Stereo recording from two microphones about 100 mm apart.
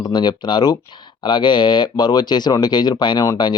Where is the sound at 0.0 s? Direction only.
45° left (ahead or behind).